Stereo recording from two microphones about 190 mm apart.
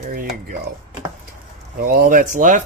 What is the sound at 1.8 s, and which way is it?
Speech, 50° right (ahead or behind).